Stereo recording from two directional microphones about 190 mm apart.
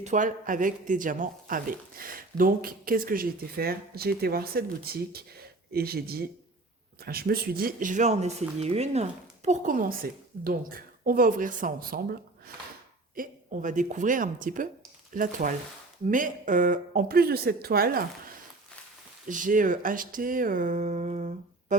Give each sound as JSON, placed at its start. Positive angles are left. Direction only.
{"t": 0.0, "sound": "speech", "side_deg": -40}
{"t": 13.1, "sound": "speech", "side_deg": -45}
{"t": 19.3, "sound": "speech", "side_deg": -45}